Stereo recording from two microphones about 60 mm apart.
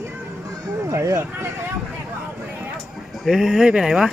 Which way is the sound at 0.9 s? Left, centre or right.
Right.